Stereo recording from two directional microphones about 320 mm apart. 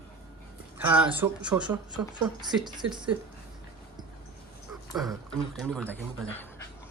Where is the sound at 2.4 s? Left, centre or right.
Centre.